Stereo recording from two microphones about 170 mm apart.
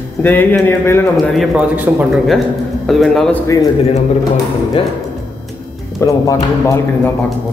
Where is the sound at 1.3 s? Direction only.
5° right (ahead or behind).